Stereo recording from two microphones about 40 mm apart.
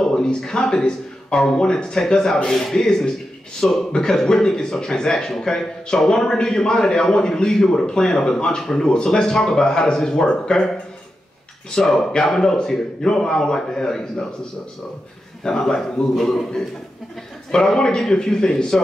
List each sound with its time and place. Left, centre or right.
0.0 s speech: centre
11.8 s speech: centre
15.4 s speech: centre
17.5 s speech: centre